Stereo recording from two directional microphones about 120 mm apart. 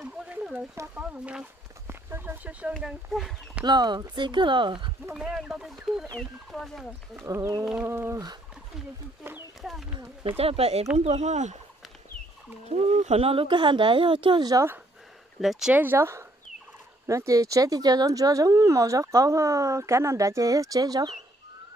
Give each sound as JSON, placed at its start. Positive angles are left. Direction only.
{"t": 0.0, "sound": "a sound", "side_deg": -10}
{"t": 0.9, "sound": "speech", "side_deg": -10}
{"t": 2.7, "sound": "speech", "side_deg": 0}
{"t": 3.6, "sound": "speech", "side_deg": -35}
{"t": 5.1, "sound": "speech", "side_deg": -5}
{"t": 7.2, "sound": "speech", "side_deg": -25}
{"t": 7.6, "sound": "speech", "side_deg": -5}
{"t": 7.9, "sound": "speech", "side_deg": -20}
{"t": 9.6, "sound": "speech", "side_deg": 0}
{"t": 10.3, "sound": "speech", "side_deg": -55}
{"t": 12.7, "sound": "speech", "side_deg": -65}
{"t": 15.4, "sound": "speech", "side_deg": -5}
{"t": 15.7, "sound": "speech", "side_deg": -15}